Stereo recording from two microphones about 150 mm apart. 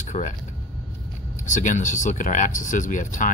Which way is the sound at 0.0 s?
60° left (ahead or behind).